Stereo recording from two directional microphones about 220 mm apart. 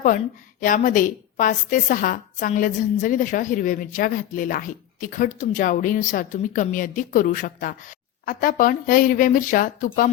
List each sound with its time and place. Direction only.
0.6 s a woman's voice: 40° left (ahead or behind)